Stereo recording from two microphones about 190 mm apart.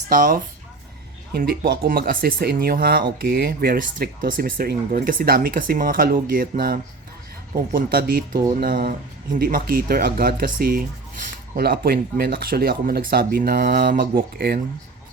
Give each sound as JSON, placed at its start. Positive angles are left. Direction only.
{"t": 0.1, "sound": "speech", "side_deg": -45}